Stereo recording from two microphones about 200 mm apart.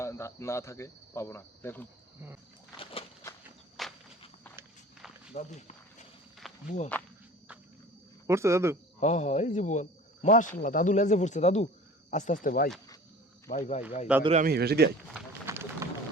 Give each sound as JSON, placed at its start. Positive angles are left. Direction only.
{"t": 0.0, "sound": "cricket", "side_deg": 15}
{"t": 3.8, "sound": "walk", "side_deg": 0}
{"t": 5.3, "sound": "speech", "side_deg": 35}
{"t": 8.3, "sound": "speech", "side_deg": -15}
{"t": 9.0, "sound": "speech", "side_deg": 35}
{"t": 14.1, "sound": "speech", "side_deg": -5}
{"t": 14.4, "sound": "speech", "side_deg": -50}
{"t": 15.4, "sound": "run", "side_deg": -15}